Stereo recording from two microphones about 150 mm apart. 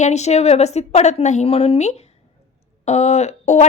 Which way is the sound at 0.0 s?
50° left (ahead or behind).